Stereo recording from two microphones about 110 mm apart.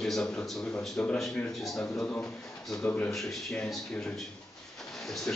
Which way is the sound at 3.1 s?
Centre (ahead or behind).